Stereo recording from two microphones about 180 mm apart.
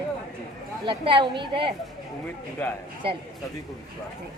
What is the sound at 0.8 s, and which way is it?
Speech, 25° right (ahead or behind).